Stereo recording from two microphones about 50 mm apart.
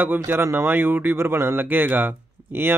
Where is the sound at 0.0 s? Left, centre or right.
Right.